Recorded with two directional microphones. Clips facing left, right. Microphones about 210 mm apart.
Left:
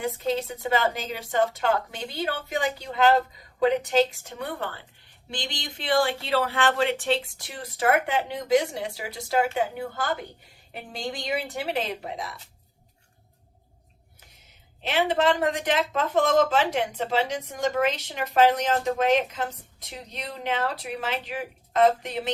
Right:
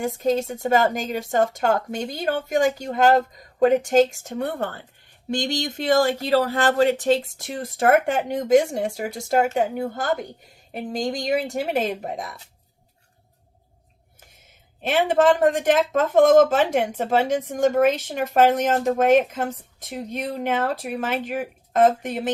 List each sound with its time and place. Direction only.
0.0 s speech: 45° right (ahead or behind)
14.8 s speech: 50° right (ahead or behind)